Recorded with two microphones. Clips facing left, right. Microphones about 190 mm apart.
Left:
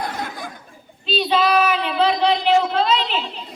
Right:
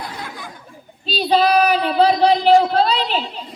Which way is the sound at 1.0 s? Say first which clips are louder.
Right 2 dB; 40° right (ahead or behind).